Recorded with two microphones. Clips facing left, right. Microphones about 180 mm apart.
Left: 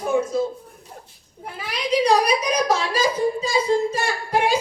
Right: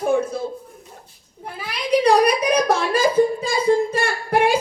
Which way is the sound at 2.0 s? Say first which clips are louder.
Right 3 dB; 55° right (ahead or behind).